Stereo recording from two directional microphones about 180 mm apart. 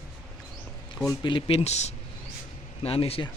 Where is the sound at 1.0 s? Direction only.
25° left (ahead or behind).